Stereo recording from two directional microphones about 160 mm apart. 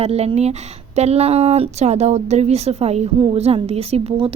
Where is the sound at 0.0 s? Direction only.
40° right (ahead or behind).